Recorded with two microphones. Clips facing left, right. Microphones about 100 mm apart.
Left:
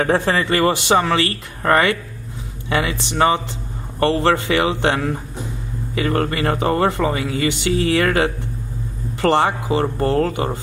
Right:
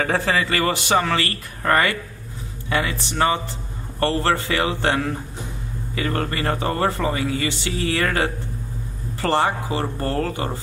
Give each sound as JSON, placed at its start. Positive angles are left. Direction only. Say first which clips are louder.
{"t": 0.0, "sound": "speech", "louder": "left 3 dB", "side_deg": 20}